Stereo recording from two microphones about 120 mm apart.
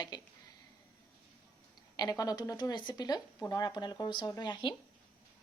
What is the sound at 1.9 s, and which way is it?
Speech, 30° left (ahead or behind).